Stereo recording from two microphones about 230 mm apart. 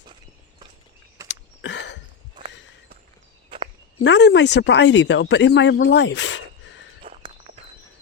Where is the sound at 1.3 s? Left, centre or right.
Left.